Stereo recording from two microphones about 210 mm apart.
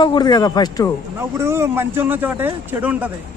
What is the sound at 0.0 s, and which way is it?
Speech, 20° left (ahead or behind).